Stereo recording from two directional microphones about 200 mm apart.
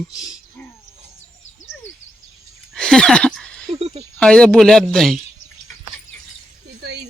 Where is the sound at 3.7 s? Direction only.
30° right (ahead or behind).